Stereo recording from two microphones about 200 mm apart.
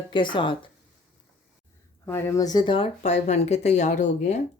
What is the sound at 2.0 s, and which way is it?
Speech, 15° left (ahead or behind).